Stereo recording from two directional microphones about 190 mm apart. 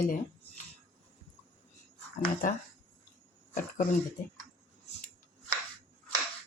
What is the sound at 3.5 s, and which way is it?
Speech, 45° left (ahead or behind).